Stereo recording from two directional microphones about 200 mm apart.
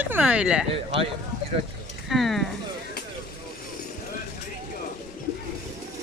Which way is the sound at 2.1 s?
Centre (ahead or behind).